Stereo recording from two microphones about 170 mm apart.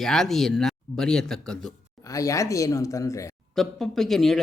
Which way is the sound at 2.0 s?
20° left (ahead or behind).